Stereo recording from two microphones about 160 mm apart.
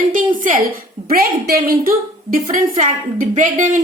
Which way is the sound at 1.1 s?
70° right (ahead or behind).